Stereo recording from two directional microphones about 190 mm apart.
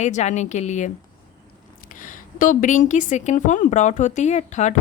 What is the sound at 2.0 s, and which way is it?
A woman's voice, 45° left (ahead or behind).